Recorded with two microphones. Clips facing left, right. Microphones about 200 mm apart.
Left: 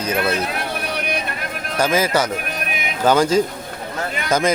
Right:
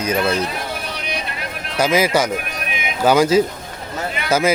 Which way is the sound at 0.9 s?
55° left (ahead or behind).